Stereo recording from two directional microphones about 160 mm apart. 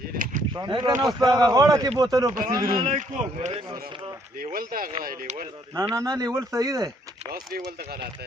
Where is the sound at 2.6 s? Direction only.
65° right (ahead or behind).